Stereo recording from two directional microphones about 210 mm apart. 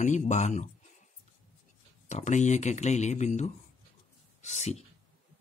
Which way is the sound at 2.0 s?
35° left (ahead or behind).